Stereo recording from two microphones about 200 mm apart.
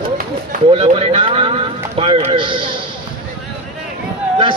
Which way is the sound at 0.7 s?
30° right (ahead or behind).